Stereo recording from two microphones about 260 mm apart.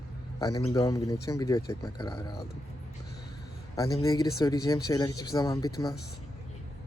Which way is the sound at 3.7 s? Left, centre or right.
Centre.